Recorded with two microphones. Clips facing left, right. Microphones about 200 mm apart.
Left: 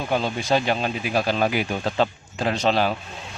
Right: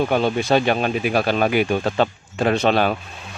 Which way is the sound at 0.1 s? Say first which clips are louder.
Right 4 dB; 65° right (ahead or behind).